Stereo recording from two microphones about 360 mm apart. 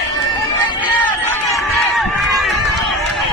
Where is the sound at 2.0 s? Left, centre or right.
Centre.